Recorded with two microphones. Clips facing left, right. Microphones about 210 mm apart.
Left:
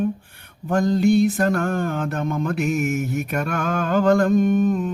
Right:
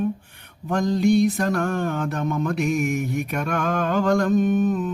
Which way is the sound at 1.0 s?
5° left (ahead or behind).